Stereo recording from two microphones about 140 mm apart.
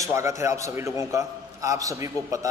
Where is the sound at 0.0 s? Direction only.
20° right (ahead or behind).